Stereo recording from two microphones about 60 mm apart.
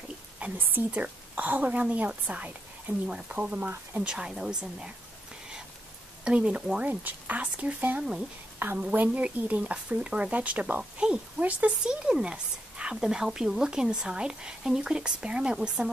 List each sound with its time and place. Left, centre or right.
0.4 s a woman's voice: right
4.0 s speech: centre
6.2 s speech: centre
6.8 s a woman's voice: right; by 15.9 s centre